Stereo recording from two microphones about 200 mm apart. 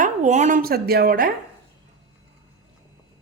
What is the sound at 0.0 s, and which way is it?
Speech, 35° right (ahead or behind).